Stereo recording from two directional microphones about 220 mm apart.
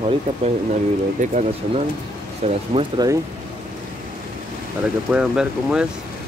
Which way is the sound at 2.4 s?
25° right (ahead or behind).